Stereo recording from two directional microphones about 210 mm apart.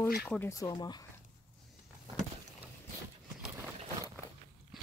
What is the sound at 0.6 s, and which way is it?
Speech, 20° left (ahead or behind).